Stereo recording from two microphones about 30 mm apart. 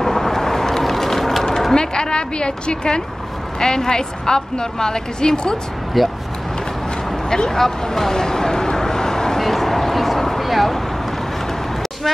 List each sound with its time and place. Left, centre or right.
0.0 s vehicle: centre
1.7 s a woman's voice: left
6.0 s speech: centre
7.2 s a sound: left
9.4 s speech: centre
10.0 s a sound: centre